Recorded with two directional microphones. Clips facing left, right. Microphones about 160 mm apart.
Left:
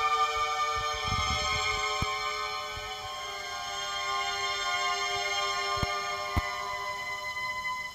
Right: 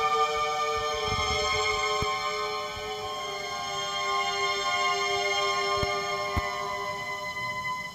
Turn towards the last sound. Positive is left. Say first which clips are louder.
# right 4 dB
turn(degrees=-40)  # may be behind; listen again after turning